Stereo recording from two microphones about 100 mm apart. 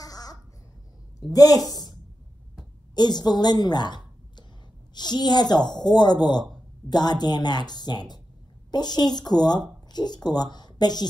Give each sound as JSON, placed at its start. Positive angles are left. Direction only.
{"t": 0.0, "sound": "a sound", "side_deg": 40}
{"t": 1.3, "sound": "a woman's voice", "side_deg": 40}
{"t": 2.9, "sound": "a woman's voice", "side_deg": 45}
{"t": 5.7, "sound": "speech", "side_deg": 5}
{"t": 5.9, "sound": "speech", "side_deg": 45}